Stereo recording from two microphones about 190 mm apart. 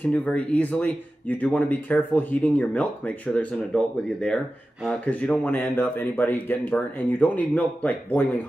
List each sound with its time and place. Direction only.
0.0 s speech: 5° left (ahead or behind)